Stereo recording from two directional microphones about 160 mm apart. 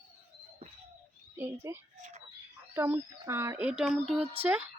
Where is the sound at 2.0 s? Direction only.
50° right (ahead or behind).